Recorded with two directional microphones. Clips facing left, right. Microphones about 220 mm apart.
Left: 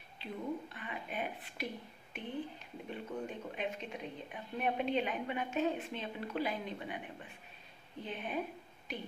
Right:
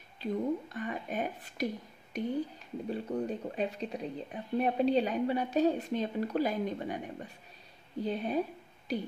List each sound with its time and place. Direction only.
0.2 s speech: 45° right (ahead or behind)